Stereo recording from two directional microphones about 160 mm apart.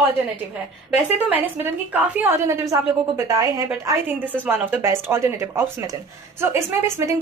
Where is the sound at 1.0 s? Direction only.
10° right (ahead or behind).